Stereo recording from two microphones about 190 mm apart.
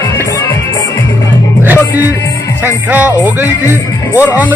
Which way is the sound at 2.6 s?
10° right (ahead or behind).